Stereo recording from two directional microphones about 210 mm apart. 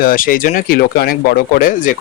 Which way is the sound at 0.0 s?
40° left (ahead or behind).